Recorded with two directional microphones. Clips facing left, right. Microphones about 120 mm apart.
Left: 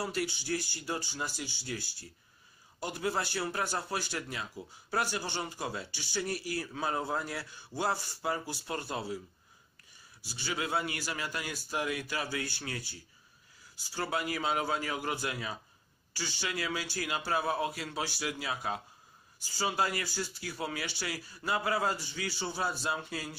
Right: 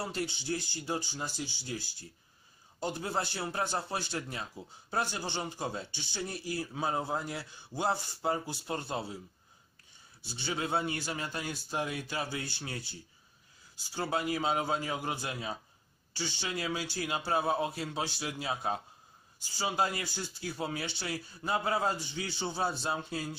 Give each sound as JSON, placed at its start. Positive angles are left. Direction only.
{"t": 0.0, "sound": "speech", "side_deg": -25}
{"t": 10.2, "sound": "speech", "side_deg": -20}